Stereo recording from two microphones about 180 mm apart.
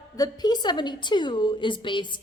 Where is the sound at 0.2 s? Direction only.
25° left (ahead or behind).